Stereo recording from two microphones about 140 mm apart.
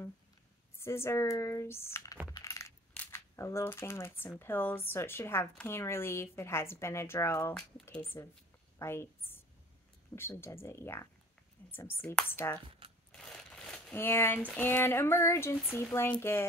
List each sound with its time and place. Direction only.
0.7 s a woman's voice: 20° left (ahead or behind)
2.3 s coin: 20° left (ahead or behind)
2.9 s a woman's voice: 15° left (ahead or behind)
13.1 s a sound: 5° left (ahead or behind)
13.9 s a woman's voice: 15° left (ahead or behind)